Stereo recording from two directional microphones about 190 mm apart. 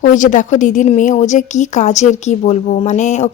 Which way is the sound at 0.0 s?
40° left (ahead or behind).